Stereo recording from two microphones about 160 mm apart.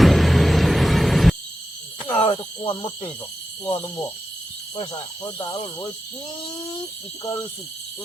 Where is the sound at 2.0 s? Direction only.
30° left (ahead or behind).